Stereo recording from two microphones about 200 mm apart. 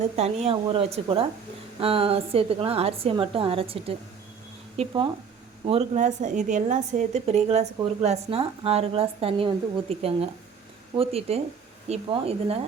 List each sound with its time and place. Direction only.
0.0 s a woman's voice: 30° right (ahead or behind)